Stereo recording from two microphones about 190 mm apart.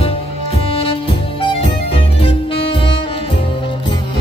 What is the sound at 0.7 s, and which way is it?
Music, 30° left (ahead or behind).